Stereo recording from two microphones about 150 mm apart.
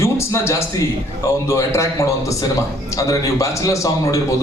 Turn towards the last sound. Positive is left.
turn(degrees=20)  # may be behind; listen again after turning